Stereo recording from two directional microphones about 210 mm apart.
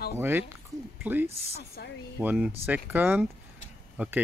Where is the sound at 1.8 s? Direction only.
50° left (ahead or behind).